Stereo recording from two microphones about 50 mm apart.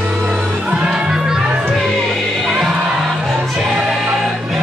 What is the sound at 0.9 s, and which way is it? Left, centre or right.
Music, centre.